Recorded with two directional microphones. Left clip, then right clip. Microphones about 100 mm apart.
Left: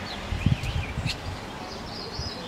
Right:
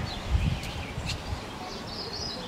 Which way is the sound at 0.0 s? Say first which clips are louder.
Left 2 dB; centre (ahead or behind).